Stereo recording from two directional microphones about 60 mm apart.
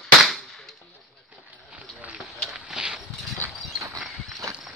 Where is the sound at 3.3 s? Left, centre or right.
Right.